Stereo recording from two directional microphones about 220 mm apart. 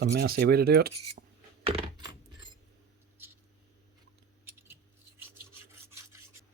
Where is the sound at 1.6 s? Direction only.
25° right (ahead or behind).